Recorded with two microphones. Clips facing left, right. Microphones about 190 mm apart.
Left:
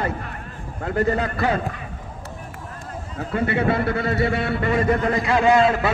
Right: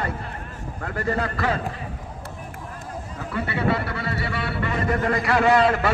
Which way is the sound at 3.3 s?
50° left (ahead or behind).